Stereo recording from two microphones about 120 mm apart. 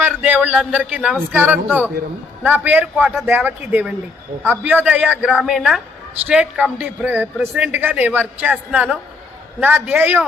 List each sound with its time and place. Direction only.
0.0 s a man's voice: 10° right (ahead or behind)